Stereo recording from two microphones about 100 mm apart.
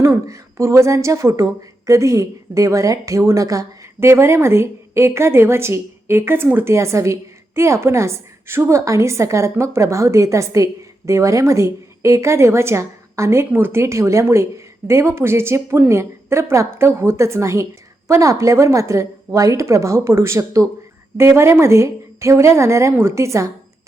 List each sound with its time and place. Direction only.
0.0 s a woman's voice: 25° right (ahead or behind)